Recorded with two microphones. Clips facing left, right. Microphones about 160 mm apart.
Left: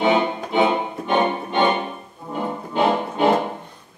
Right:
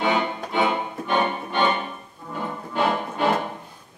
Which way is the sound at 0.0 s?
20° left (ahead or behind).